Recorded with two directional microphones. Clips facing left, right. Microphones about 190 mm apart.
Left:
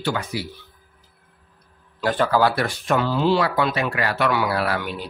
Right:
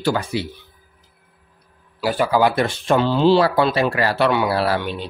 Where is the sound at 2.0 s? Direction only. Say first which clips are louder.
Right 2 dB; 10° right (ahead or behind); by 5.1 s 25° right (ahead or behind).